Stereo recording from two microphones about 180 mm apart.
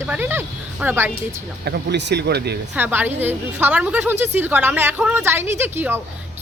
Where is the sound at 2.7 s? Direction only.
10° right (ahead or behind).